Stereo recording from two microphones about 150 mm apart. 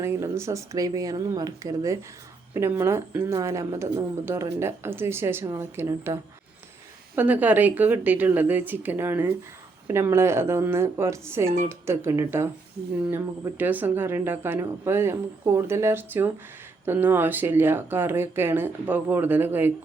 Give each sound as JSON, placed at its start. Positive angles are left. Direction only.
{"t": 0.0, "sound": "speech", "side_deg": -20}
{"t": 7.2, "sound": "speech", "side_deg": -10}